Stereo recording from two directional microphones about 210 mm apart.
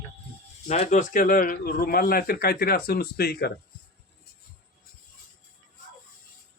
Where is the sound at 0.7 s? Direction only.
35° left (ahead or behind).